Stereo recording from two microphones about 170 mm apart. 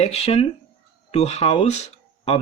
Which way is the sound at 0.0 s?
40° left (ahead or behind).